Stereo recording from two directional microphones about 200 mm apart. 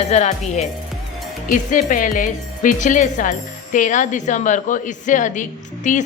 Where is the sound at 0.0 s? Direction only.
35° left (ahead or behind).